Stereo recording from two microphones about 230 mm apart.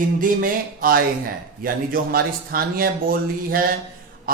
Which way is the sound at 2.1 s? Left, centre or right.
Right.